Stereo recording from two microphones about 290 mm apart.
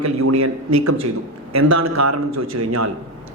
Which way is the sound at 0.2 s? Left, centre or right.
Right.